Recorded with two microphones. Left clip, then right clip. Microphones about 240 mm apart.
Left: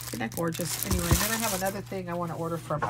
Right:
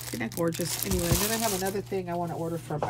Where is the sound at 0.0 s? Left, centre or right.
Centre.